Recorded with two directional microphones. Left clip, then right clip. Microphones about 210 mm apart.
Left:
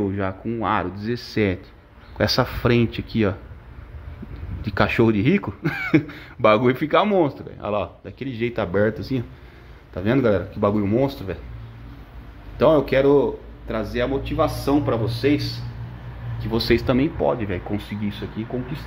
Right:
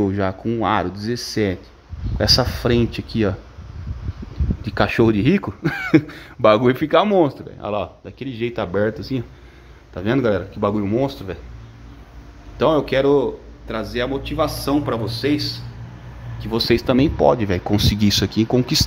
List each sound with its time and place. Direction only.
0.0 s speech: 15° right (ahead or behind)
4.6 s speech: 10° right (ahead or behind)
12.5 s speech: centre (ahead or behind); by 17.8 s 25° right (ahead or behind)
18.0 s speech: 50° right (ahead or behind)